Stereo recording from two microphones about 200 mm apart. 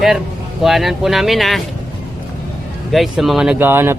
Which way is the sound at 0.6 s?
Centre (ahead or behind).